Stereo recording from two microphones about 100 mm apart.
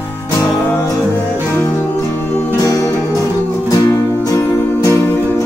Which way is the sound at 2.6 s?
35° left (ahead or behind).